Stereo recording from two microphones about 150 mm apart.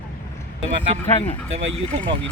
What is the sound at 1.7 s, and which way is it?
Speech, 35° right (ahead or behind).